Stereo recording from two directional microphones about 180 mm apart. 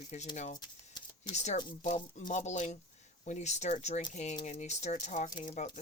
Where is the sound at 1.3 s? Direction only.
40° left (ahead or behind).